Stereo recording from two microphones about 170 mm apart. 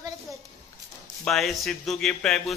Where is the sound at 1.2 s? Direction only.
Centre (ahead or behind).